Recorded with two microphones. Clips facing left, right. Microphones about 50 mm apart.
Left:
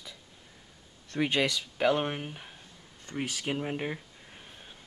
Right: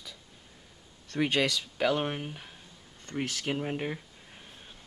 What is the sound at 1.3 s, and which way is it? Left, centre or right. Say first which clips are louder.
Speech: even; centre.